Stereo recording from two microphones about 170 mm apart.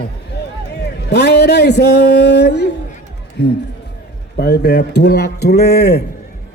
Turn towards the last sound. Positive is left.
turn(degrees=75)  # may be behind; listen again after turning